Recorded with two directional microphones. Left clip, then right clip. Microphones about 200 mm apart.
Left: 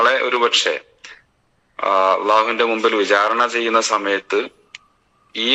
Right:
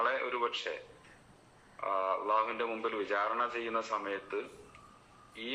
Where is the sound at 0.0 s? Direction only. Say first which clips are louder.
Left 17 dB; 55° left (ahead or behind).